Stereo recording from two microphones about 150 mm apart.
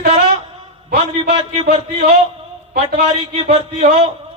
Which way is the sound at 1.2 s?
40° right (ahead or behind).